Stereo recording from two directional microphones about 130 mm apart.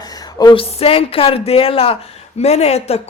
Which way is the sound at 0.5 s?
45° left (ahead or behind).